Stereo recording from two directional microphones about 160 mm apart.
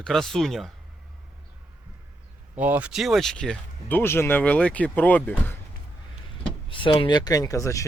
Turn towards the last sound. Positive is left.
turn(degrees=20)  # may be behind; listen again after turning